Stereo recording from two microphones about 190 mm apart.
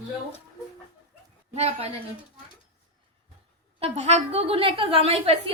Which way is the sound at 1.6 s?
35° right (ahead or behind).